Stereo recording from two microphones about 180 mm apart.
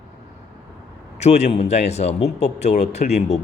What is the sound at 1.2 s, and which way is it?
A man's voice, 35° left (ahead or behind).